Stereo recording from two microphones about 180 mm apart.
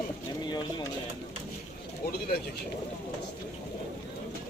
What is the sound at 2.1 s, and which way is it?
Speech, 60° left (ahead or behind).